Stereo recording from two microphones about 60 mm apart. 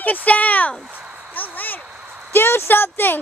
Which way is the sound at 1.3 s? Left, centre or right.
Left.